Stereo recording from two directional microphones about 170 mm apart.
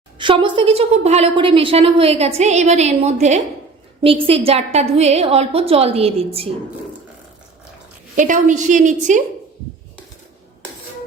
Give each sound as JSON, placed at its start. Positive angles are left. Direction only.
{"t": 0.2, "sound": "a woman's voice", "side_deg": -30}
{"t": 8.1, "sound": "a woman's voice", "side_deg": -50}